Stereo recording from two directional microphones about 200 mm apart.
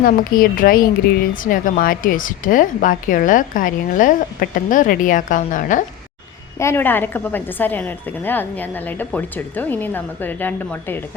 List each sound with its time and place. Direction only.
0.0 s a woman's voice: 45° left (ahead or behind)
6.6 s a woman's voice: 10° left (ahead or behind)